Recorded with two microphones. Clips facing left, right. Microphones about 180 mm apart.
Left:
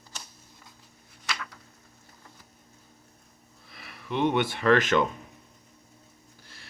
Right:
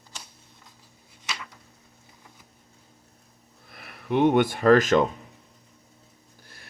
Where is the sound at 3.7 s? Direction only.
55° right (ahead or behind).